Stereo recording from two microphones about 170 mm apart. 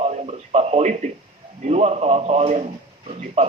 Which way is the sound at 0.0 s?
40° right (ahead or behind).